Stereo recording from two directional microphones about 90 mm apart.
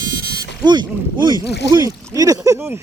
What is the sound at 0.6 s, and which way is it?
Speech, 55° right (ahead or behind).